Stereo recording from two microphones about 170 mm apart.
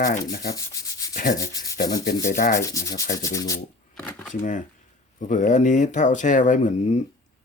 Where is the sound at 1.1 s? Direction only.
55° left (ahead or behind).